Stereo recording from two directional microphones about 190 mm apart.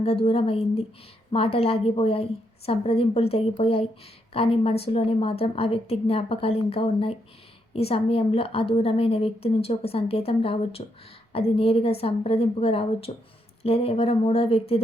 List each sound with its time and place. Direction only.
0.0 s a woman's voice: 30° left (ahead or behind)